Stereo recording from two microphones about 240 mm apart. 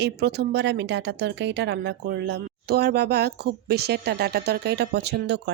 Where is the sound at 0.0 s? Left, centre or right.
Right.